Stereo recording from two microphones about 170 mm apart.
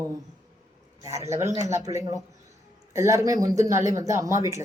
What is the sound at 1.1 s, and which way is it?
Speech, 15° right (ahead or behind).